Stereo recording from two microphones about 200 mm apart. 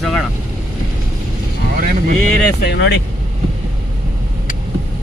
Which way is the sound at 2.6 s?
55° left (ahead or behind).